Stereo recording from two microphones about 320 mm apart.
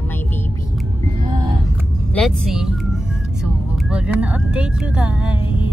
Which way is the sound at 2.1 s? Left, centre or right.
Centre.